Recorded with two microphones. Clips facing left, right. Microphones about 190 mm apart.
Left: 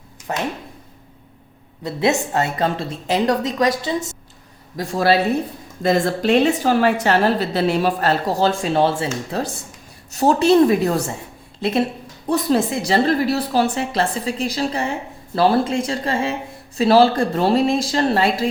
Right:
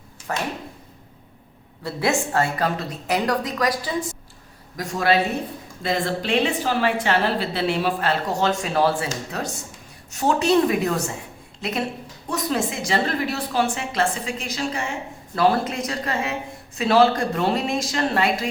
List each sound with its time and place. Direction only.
0.3 s a woman's voice: 20° left (ahead or behind)
1.8 s a woman's voice: 20° left (ahead or behind)